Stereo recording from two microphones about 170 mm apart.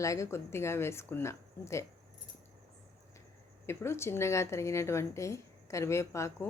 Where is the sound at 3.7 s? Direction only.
15° left (ahead or behind).